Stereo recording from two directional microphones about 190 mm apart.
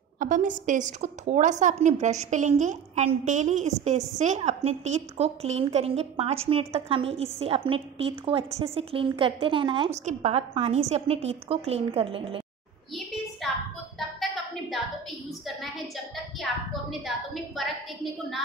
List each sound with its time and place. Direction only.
0.2 s a woman's voice: 45° right (ahead or behind)
13.4 s a sound: centre (ahead or behind)
17.0 s a woman's voice: centre (ahead or behind)